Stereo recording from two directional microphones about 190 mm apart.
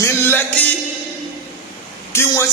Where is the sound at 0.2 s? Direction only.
10° left (ahead or behind).